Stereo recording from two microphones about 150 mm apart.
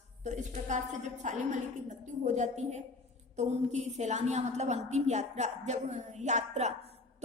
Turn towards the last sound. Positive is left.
turn(degrees=-45)  # may be behind; listen again after turning